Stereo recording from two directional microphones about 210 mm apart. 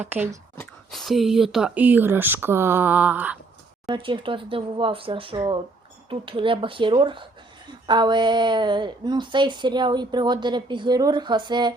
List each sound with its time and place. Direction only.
0.0 s speech: 10° right (ahead or behind)
0.5 s speech: 5° left (ahead or behind)
3.8 s a woman's voice: 20° right (ahead or behind)